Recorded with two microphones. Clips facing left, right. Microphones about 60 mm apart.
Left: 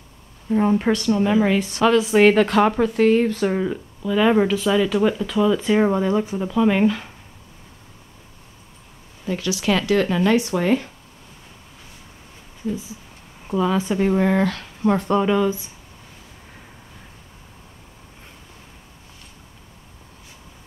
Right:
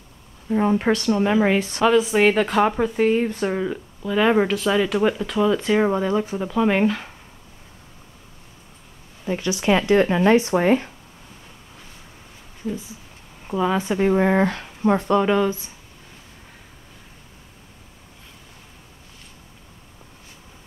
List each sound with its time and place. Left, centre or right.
0.5 s speech: centre
2.0 s speech: centre
9.4 s speech: right
13.6 s speech: centre